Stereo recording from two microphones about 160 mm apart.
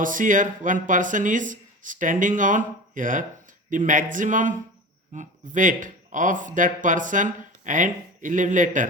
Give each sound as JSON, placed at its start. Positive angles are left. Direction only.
{"t": 0.0, "sound": "speech", "side_deg": -55}